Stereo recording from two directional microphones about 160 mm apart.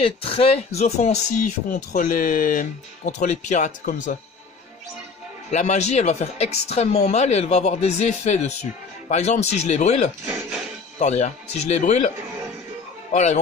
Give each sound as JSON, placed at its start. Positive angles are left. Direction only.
{"t": 0.0, "sound": "speech", "side_deg": 35}
{"t": 1.9, "sound": "speech", "side_deg": 60}
{"t": 5.5, "sound": "speech", "side_deg": 45}
{"t": 13.1, "sound": "speech", "side_deg": 45}